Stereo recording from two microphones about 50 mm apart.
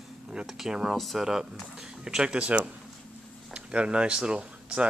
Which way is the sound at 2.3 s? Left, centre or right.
Right.